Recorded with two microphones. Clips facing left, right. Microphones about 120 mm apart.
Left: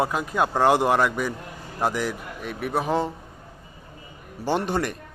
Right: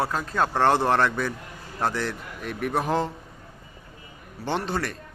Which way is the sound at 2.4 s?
Centre (ahead or behind).